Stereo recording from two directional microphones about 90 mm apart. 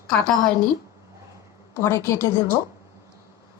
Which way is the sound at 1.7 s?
30° left (ahead or behind).